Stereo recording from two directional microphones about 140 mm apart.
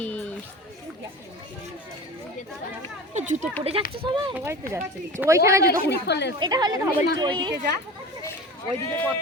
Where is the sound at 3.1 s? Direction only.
60° right (ahead or behind).